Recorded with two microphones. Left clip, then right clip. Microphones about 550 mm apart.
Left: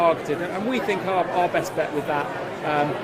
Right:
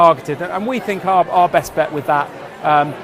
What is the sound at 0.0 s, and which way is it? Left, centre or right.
Speech, right.